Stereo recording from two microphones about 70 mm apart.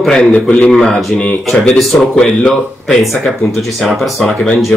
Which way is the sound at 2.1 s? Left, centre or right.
Centre.